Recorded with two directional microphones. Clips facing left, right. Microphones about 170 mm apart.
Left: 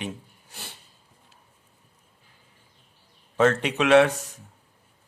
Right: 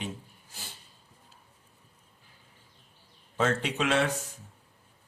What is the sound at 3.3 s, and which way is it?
Speech, 70° left (ahead or behind).